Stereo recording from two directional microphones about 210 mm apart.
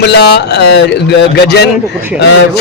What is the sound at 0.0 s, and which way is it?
A man's voice, 50° left (ahead or behind).